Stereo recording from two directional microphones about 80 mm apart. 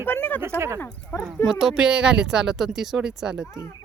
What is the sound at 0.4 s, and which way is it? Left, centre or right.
Speech, right.